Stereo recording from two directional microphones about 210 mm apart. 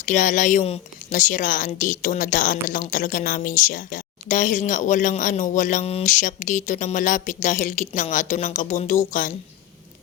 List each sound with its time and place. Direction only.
0.0 s a woman's voice: 35° left (ahead or behind)